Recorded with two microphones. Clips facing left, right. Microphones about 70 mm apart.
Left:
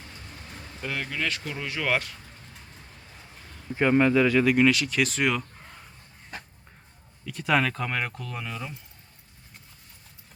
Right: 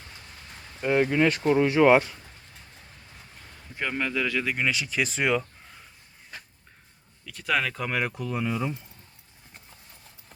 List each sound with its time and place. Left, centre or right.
0.8 s speech: right
3.5 s a man's voice: centre
4.3 s speech: centre
7.3 s speech: centre